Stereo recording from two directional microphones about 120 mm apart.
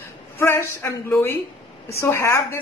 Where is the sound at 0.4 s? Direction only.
20° left (ahead or behind).